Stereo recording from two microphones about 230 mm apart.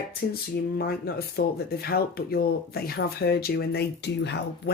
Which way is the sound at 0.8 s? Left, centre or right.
Left.